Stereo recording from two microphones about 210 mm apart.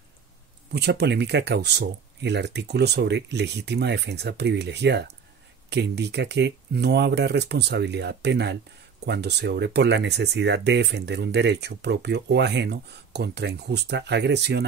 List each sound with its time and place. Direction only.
0.7 s speech: 50° right (ahead or behind)